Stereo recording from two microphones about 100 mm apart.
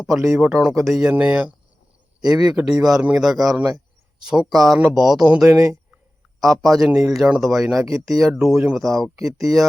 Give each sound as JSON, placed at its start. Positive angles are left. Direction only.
{"t": 0.0, "sound": "speech", "side_deg": 0}
{"t": 0.4, "sound": "speech", "side_deg": -15}
{"t": 0.9, "sound": "speech", "side_deg": -5}
{"t": 2.2, "sound": "a man's voice", "side_deg": -40}
{"t": 2.5, "sound": "speech", "side_deg": -5}
{"t": 3.2, "sound": "speech", "side_deg": 0}
{"t": 5.5, "sound": "speech", "side_deg": -30}
{"t": 6.4, "sound": "speech", "side_deg": 0}